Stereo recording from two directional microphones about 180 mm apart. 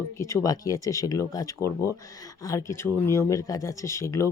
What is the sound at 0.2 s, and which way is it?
Speech, 15° left (ahead or behind).